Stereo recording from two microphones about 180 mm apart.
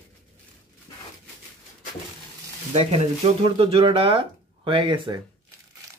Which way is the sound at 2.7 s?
40° right (ahead or behind).